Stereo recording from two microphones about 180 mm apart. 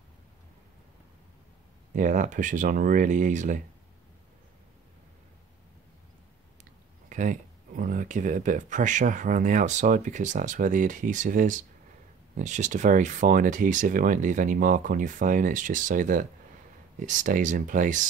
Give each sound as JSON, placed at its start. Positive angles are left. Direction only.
{"t": 2.0, "sound": "speech", "side_deg": -45}
{"t": 6.6, "sound": "speech", "side_deg": -45}